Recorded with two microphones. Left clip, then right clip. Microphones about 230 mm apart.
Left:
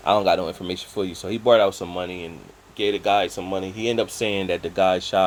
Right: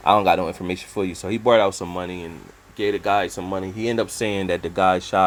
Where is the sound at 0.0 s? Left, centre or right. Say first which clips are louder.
Right 2 dB; right.